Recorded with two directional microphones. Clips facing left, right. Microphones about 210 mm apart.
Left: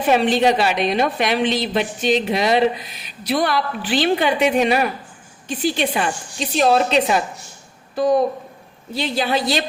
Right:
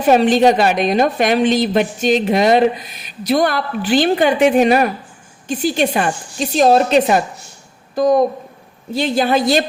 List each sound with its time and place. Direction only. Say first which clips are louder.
0.1 s a woman's voice: right 5 dB; 45° right (ahead or behind)